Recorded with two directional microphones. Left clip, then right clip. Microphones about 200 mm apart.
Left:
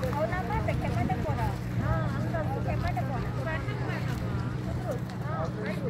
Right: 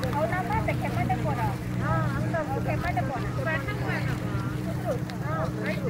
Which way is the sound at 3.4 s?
65° left (ahead or behind).